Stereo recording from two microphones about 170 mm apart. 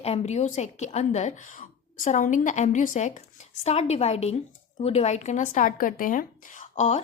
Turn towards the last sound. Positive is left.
turn(degrees=40)  # may be behind; listen again after turning